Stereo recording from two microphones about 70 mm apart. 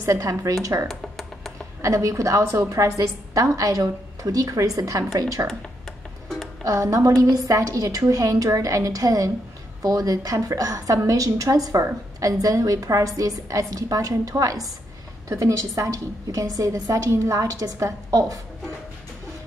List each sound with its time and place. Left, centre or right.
0.0 s a woman's voice: right
0.8 s computer keyboard: centre
1.8 s a woman's voice: right
6.6 s a woman's voice: right